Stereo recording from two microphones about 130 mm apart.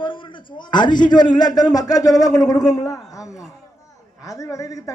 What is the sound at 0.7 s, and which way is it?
A man's voice, 35° left (ahead or behind).